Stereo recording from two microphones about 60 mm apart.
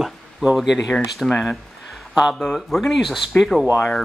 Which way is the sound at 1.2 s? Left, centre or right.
Centre.